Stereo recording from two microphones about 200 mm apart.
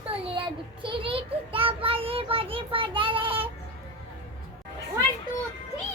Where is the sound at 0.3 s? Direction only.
25° right (ahead or behind).